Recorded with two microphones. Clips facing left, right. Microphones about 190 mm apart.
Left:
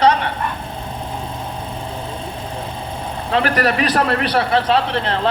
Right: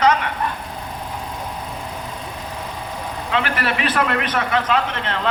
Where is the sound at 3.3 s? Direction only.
40° left (ahead or behind).